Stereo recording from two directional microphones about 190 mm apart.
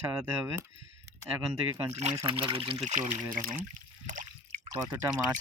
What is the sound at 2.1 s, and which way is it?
Speech, 25° right (ahead or behind).